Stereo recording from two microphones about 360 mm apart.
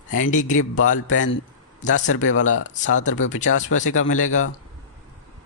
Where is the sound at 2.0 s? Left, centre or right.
Left.